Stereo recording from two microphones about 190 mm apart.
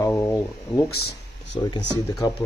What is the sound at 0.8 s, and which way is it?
Speech, 55° left (ahead or behind).